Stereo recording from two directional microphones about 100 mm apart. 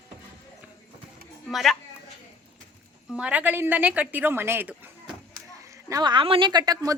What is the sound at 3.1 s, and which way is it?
A woman's voice, 10° right (ahead or behind).